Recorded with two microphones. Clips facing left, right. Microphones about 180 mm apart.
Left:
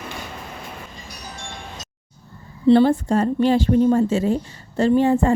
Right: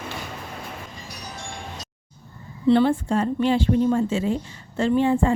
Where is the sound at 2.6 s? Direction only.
35° left (ahead or behind).